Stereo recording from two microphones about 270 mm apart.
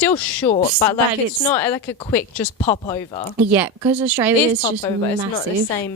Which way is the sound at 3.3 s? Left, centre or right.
Centre.